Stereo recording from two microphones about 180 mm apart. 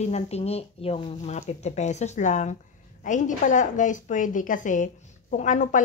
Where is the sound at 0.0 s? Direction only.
35° left (ahead or behind).